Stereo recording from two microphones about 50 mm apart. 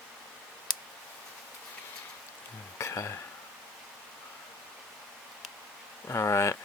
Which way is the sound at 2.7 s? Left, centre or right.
Left.